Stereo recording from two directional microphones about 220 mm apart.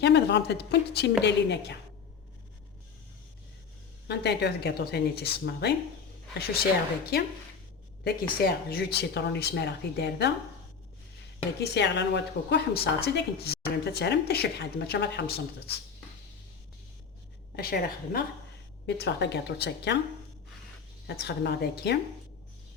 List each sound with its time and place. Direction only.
0.0 s a woman's voice: 50° left (ahead or behind)
4.1 s a woman's voice: 50° left (ahead or behind)
8.4 s a woman's voice: 45° left (ahead or behind)
11.6 s a woman's voice: 50° left (ahead or behind)
17.6 s a woman's voice: 40° left (ahead or behind)
21.1 s a woman's voice: 50° left (ahead or behind)